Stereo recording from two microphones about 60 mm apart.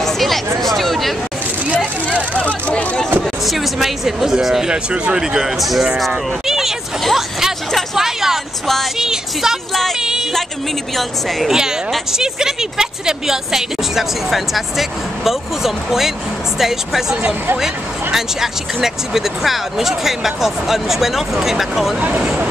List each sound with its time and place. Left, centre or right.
0.0 s chatter: centre
0.6 s speech: centre
2.3 s speech: left
3.4 s speech: centre
11.0 s speech: centre
12.1 s speech: centre